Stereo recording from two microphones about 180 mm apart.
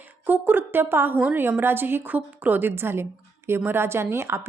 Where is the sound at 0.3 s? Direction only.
10° right (ahead or behind).